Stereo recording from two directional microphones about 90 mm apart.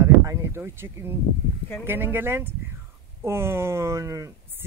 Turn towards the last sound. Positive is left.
turn(degrees=-35)  # may be behind; listen again after turning